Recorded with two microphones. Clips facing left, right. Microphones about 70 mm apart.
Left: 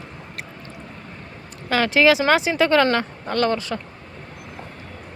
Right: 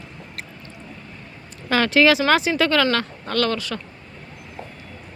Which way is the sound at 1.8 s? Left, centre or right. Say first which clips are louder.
Even; centre.